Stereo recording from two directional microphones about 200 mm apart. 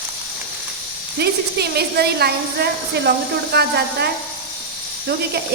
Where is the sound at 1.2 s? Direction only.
55° right (ahead or behind).